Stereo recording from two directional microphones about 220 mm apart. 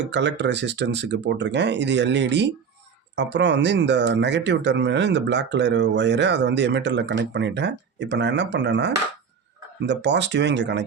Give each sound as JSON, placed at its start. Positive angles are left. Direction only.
{"t": 0.0, "sound": "speech", "side_deg": -55}